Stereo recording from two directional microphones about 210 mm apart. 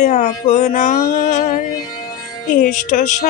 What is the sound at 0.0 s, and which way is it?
Speech, 35° left (ahead or behind).